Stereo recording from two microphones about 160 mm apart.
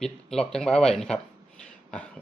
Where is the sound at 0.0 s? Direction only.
5° left (ahead or behind).